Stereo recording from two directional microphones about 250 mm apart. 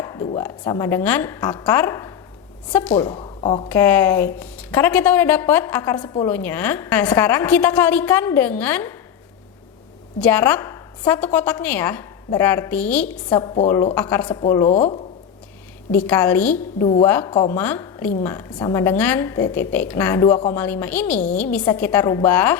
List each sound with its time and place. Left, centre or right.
0.0 s a sound: centre
0.3 s a woman's voice: centre
3.2 s speech: left
3.7 s a woman's voice: centre
10.2 s a woman's voice: centre
13.4 s a woman's voice: centre
14.4 s a woman's voice: centre
15.9 s a woman's voice: centre
16.8 s a woman's voice: centre